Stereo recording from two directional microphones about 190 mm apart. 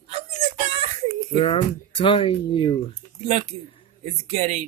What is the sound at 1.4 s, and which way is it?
Speech, 25° left (ahead or behind).